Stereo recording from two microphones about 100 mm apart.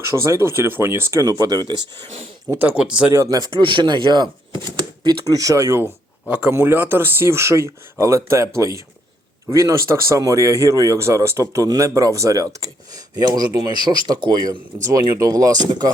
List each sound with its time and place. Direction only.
0.0 s speech: 30° right (ahead or behind)
2.0 s speech: 70° right (ahead or behind)
2.6 s speech: 15° right (ahead or behind)
3.1 s speech: 35° right (ahead or behind); by 4.6 s 50° right (ahead or behind)
5.0 s speech: 40° right (ahead or behind)
6.2 s speech: 15° right (ahead or behind); by 15.9 s 45° right (ahead or behind)